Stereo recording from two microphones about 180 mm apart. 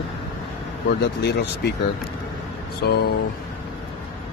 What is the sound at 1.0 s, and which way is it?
Speech, 70° left (ahead or behind).